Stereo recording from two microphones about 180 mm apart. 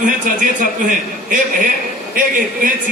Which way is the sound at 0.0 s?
50° right (ahead or behind).